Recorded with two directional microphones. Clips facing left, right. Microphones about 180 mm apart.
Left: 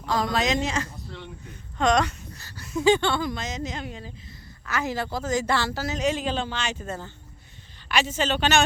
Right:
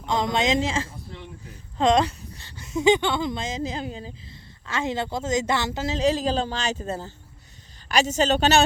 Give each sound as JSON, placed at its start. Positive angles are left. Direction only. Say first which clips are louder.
{"t": 0.0, "sound": "a woman's voice", "louder": "right 1 dB", "side_deg": -20}
{"t": 0.9, "sound": "a sound", "louder": "even", "side_deg": -5}
{"t": 1.8, "sound": "a woman's voice", "louder": "right 2 dB", "side_deg": -25}